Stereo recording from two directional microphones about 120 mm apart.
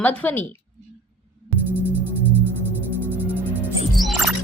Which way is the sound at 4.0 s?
Centre (ahead or behind).